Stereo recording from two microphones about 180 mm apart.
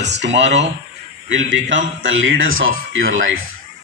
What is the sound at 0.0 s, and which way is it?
A man's voice, 75° right (ahead or behind).